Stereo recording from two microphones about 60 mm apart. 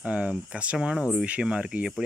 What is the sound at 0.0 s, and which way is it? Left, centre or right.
Speech, right.